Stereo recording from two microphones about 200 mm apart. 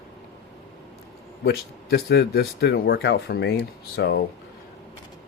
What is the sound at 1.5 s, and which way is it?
Speech, 55° left (ahead or behind).